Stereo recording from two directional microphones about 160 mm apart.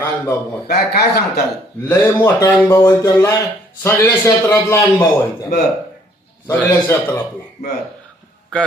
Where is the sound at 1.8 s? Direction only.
15° left (ahead or behind).